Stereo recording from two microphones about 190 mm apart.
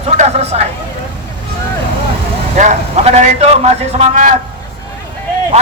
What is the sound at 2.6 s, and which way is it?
A man's voice, 35° right (ahead or behind).